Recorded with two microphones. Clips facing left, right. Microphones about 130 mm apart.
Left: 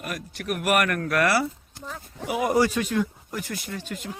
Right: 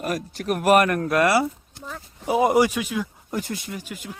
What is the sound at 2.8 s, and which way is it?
Speech, 5° right (ahead or behind).